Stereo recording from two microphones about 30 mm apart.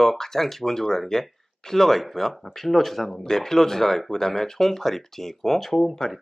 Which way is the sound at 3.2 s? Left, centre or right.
Centre.